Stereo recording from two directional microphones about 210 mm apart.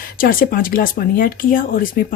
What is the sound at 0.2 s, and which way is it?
Speech, 40° left (ahead or behind).